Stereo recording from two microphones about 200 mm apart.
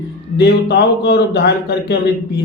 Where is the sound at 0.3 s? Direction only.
55° left (ahead or behind).